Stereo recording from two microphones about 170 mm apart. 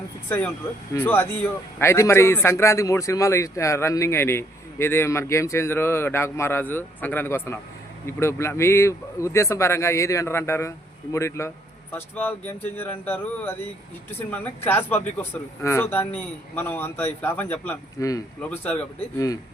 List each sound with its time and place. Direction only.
0.3 s speech: 10° left (ahead or behind)